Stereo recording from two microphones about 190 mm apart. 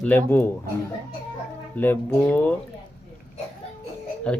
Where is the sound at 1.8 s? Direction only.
10° left (ahead or behind).